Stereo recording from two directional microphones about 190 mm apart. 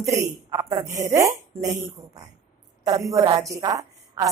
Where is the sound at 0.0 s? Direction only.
15° right (ahead or behind).